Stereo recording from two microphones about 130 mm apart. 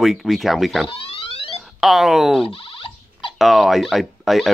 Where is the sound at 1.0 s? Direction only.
45° left (ahead or behind).